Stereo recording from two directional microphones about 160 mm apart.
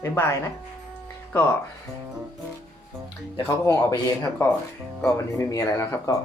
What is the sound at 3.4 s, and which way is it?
Speech, 15° left (ahead or behind).